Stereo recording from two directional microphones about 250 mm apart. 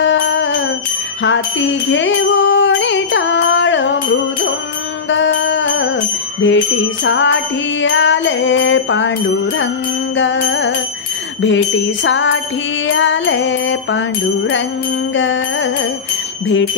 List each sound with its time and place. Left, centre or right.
0.0 s music: left
1.2 s jingle bell: left
7.1 s music: left
10.1 s music: left
15.1 s music: left